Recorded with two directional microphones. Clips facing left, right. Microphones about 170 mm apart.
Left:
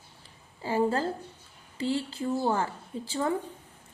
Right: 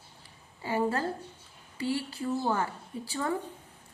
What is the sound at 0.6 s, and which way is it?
A woman's voice, 30° left (ahead or behind).